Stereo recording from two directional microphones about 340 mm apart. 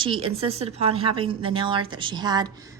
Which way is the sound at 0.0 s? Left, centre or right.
Centre.